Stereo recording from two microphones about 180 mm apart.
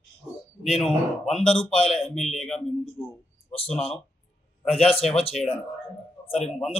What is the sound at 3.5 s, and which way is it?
Speech, 30° left (ahead or behind).